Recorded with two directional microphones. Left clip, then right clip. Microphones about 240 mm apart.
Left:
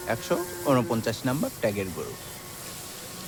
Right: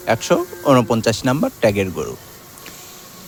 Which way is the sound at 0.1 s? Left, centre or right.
Right.